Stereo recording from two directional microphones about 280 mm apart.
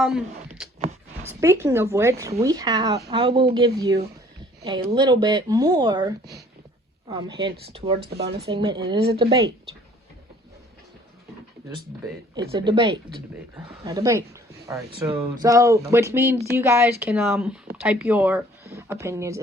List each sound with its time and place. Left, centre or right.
0.0 s speech: centre
8.0 s speech: right
8.4 s speech: centre
12.5 s speech: centre